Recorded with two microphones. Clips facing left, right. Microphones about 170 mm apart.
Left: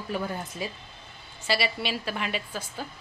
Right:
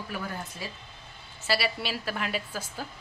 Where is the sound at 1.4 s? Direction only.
5° right (ahead or behind).